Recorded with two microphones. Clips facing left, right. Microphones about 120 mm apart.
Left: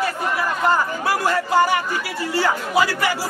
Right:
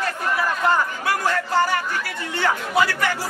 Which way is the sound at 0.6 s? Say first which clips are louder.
Left 2 dB; 5° left (ahead or behind).